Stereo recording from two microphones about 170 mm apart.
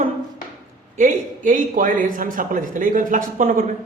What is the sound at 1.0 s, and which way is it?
Speech, 50° right (ahead or behind).